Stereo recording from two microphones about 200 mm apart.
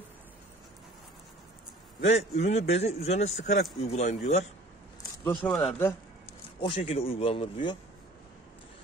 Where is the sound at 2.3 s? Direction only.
30° left (ahead or behind).